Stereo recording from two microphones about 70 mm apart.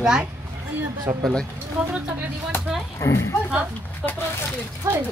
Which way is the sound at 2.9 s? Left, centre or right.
Left.